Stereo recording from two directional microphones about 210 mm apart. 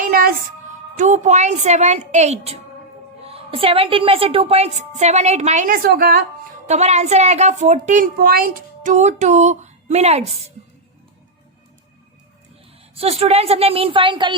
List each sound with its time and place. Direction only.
0.0 s music: 45° right (ahead or behind)
0.9 s a woman's voice: 35° right (ahead or behind)
6.7 s a woman's voice: 35° right (ahead or behind)
12.9 s a woman's voice: 30° right (ahead or behind)